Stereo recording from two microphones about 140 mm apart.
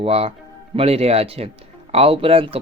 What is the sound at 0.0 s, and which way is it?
Speech, 45° right (ahead or behind).